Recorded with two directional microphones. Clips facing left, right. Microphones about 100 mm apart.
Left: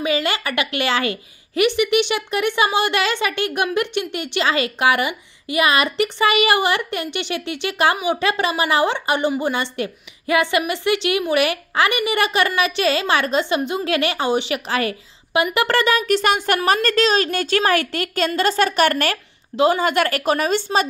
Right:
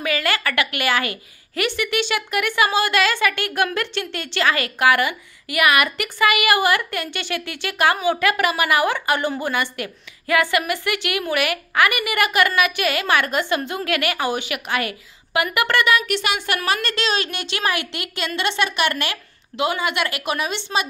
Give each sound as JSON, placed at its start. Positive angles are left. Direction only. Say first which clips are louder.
{"t": 0.0, "sound": "a woman's voice", "louder": "left 2 dB", "side_deg": 20}
{"t": 19.5, "sound": "speech", "louder": "left 6 dB", "side_deg": 35}